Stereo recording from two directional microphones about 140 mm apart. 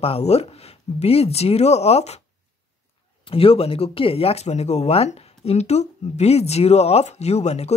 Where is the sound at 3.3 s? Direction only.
40° left (ahead or behind).